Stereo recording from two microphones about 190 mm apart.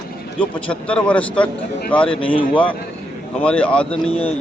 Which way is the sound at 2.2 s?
25° left (ahead or behind).